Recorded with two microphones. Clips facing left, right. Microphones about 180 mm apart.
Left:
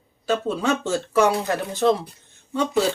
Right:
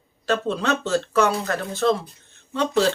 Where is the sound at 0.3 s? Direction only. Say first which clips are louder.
Even; 10° left (ahead or behind).